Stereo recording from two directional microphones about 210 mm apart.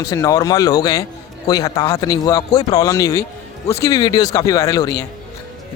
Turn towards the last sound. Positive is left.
turn(degrees=15)  # may be behind; listen again after turning